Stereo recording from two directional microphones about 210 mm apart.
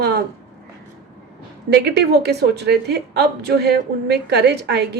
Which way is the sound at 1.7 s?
50° right (ahead or behind).